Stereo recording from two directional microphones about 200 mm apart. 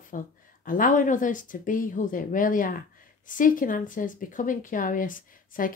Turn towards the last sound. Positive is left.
turn(degrees=45)  # may be behind; listen again after turning